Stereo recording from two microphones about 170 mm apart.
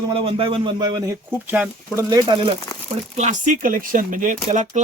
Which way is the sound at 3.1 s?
45° right (ahead or behind).